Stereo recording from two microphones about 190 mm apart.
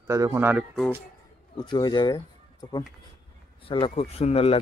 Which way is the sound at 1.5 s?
25° left (ahead or behind).